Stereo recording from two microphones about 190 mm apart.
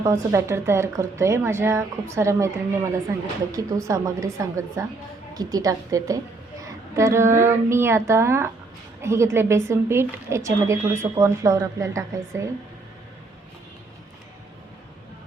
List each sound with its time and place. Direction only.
0.0 s a woman's voice: 15° right (ahead or behind)
3.5 s a woman's voice: 20° right (ahead or behind)